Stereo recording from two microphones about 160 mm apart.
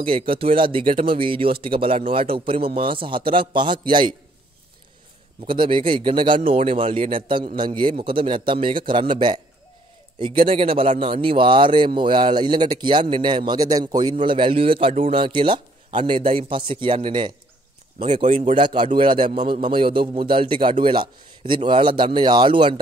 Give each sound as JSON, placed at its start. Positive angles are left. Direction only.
{"t": 0.0, "sound": "speech", "side_deg": -35}
{"t": 5.5, "sound": "speech", "side_deg": -30}